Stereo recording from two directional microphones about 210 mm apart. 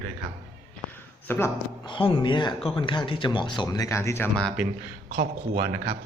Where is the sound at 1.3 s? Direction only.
10° left (ahead or behind).